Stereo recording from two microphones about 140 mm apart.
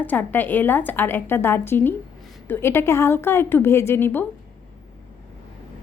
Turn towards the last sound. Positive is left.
turn(degrees=15)  # may be behind; listen again after turning